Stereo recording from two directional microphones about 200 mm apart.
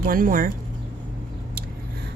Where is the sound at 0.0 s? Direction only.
45° right (ahead or behind).